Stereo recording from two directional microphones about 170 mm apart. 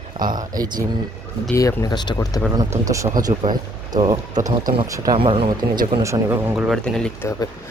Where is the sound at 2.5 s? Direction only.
20° right (ahead or behind).